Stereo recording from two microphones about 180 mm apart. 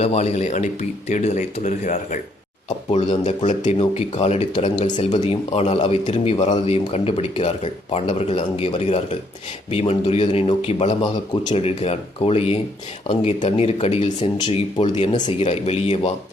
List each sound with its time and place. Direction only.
0.0 s speech: 35° left (ahead or behind)